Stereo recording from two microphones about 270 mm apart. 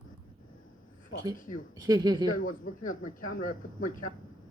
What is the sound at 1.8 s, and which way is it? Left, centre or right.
Speech, centre.